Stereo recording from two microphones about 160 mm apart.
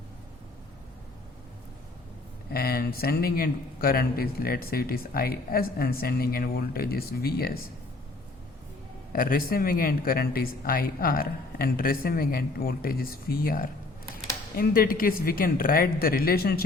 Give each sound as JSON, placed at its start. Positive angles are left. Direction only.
{"t": 2.5, "sound": "speech", "side_deg": 70}
{"t": 9.1, "sound": "a woman's voice", "side_deg": 65}